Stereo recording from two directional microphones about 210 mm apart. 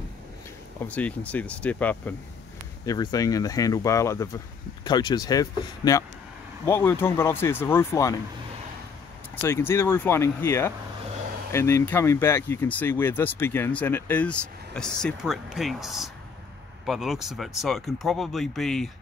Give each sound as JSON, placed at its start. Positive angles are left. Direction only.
{"t": 0.8, "sound": "speech", "side_deg": 5}
{"t": 9.3, "sound": "speech", "side_deg": 10}